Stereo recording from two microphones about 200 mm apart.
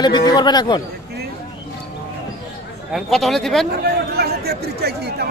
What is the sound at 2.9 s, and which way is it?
Speech, centre (ahead or behind).